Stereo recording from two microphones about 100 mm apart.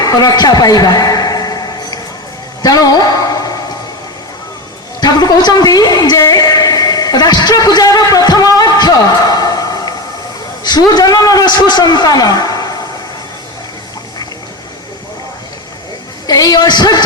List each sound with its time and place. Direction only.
0.0 s a sound: 40° left (ahead or behind)
4.9 s a woman's voice: 40° left (ahead or behind)
16.2 s speech: 40° left (ahead or behind)